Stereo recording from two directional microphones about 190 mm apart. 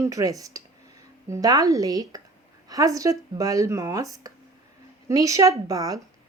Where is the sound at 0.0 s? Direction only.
15° right (ahead or behind).